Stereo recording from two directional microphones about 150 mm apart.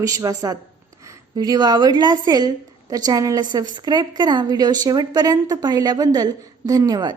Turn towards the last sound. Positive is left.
turn(degrees=-25)  # may be behind; listen again after turning